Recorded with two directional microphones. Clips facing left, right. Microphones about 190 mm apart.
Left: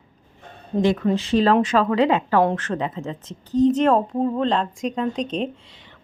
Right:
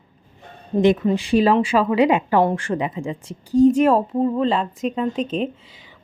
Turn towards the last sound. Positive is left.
turn(degrees=-5)  # may be behind; listen again after turning